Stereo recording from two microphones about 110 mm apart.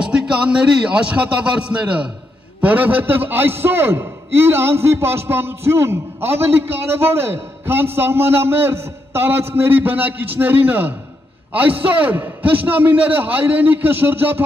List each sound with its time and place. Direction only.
0.0 s a man's voice: 10° right (ahead or behind)